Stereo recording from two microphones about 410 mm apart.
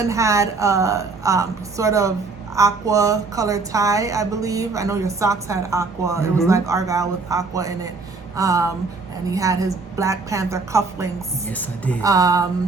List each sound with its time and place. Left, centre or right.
0.0 s a woman's voice: centre